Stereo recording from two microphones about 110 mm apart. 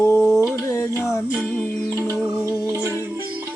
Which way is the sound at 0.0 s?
30° left (ahead or behind).